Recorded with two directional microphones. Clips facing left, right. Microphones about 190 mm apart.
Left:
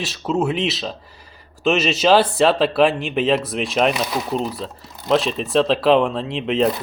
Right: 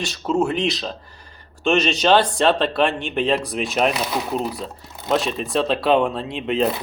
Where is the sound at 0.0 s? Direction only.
5° left (ahead or behind).